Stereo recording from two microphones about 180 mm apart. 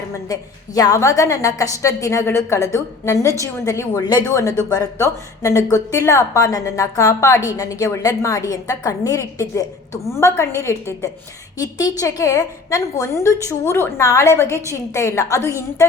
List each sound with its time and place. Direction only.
0.1 s a woman's voice: 20° left (ahead or behind)